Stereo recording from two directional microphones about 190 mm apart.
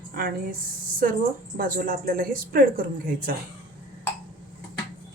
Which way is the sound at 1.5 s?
45° right (ahead or behind).